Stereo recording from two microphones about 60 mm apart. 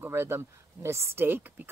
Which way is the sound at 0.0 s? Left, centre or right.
Right.